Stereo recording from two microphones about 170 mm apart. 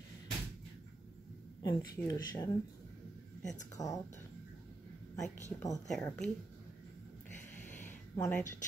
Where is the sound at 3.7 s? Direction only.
20° left (ahead or behind).